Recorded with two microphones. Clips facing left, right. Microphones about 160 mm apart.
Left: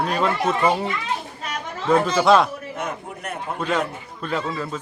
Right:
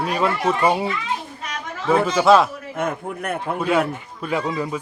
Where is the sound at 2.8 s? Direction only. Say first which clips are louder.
Right 8 dB; 55° right (ahead or behind).